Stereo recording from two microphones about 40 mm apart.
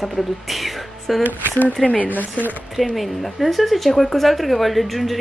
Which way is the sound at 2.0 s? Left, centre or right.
Left.